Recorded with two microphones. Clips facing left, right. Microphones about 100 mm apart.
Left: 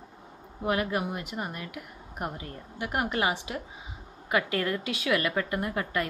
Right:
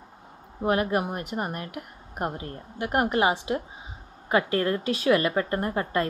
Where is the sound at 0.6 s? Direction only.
35° right (ahead or behind).